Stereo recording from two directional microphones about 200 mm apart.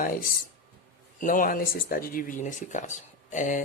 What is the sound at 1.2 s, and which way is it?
Speech, 40° left (ahead or behind).